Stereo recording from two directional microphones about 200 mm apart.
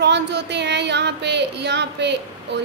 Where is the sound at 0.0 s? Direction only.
60° right (ahead or behind).